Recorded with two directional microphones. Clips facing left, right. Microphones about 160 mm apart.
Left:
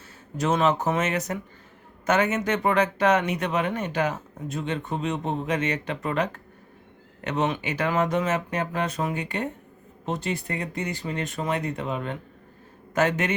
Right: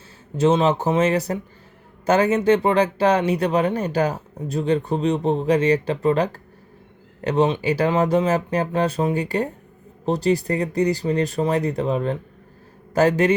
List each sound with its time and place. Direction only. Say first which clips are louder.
0.3 s a man's voice: right 5 dB; 30° right (ahead or behind)